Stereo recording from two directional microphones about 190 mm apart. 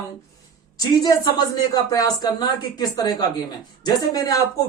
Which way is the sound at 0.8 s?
20° left (ahead or behind).